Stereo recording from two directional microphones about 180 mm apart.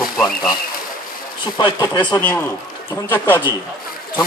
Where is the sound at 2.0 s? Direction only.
10° left (ahead or behind).